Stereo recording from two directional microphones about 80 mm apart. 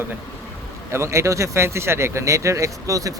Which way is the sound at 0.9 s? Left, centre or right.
Right.